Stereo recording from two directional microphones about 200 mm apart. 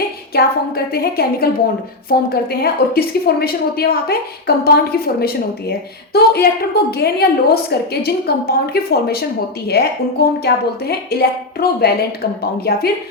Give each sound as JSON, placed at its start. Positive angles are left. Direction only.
{"t": 0.3, "sound": "a woman's voice", "side_deg": 50}